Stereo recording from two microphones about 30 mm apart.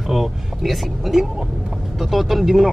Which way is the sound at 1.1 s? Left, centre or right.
Centre.